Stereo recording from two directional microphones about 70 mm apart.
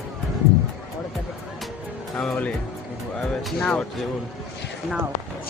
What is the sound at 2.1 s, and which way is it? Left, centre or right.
Speech, centre.